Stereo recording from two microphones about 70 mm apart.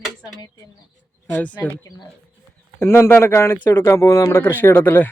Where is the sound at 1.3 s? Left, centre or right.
Left.